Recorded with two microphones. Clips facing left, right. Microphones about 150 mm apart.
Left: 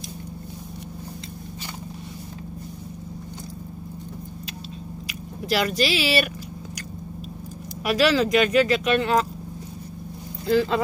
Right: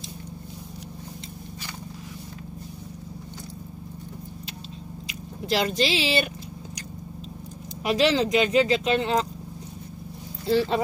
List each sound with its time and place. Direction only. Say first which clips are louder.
5.0 s chewing: even; 25° right (ahead or behind)
7.8 s speech: left 1 dB; 25° right (ahead or behind)
10.4 s speech: left 2 dB; 30° right (ahead or behind)